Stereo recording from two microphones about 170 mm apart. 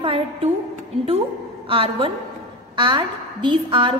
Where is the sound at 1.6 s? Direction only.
30° right (ahead or behind).